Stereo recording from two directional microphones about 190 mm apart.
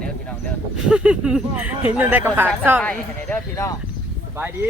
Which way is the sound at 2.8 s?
5° left (ahead or behind).